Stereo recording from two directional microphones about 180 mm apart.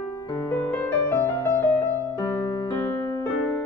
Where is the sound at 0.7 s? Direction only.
15° left (ahead or behind).